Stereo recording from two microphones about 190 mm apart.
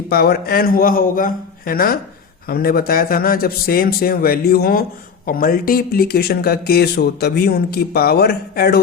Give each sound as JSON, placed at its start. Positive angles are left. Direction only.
{"t": 0.1, "sound": "a man's voice", "side_deg": 55}